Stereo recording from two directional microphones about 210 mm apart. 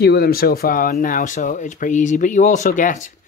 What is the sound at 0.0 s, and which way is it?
Speech, 50° left (ahead or behind).